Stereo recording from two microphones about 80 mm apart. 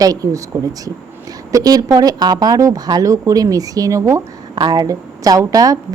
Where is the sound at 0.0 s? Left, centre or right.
Right.